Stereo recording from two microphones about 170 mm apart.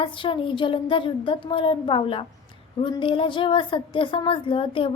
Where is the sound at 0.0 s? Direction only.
30° left (ahead or behind).